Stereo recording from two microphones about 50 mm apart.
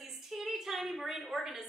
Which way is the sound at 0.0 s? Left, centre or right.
Centre.